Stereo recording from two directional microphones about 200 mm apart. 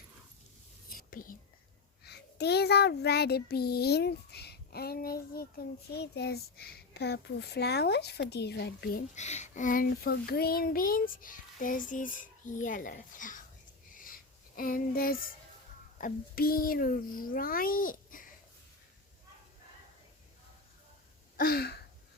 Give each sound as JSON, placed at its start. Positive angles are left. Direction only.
{"t": 0.9, "sound": "whispering", "side_deg": 45}
{"t": 2.0, "sound": "child singing", "side_deg": 55}
{"t": 9.1, "sound": "child singing", "side_deg": 35}
{"t": 13.9, "sound": "a sound", "side_deg": 45}
{"t": 16.0, "sound": "child singing", "side_deg": 45}
{"t": 21.3, "sound": "a sound", "side_deg": 50}